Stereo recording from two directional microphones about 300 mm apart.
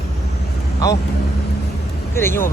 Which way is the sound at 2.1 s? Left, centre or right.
Centre.